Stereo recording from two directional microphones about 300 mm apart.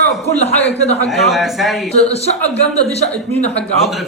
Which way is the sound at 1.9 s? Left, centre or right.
Left.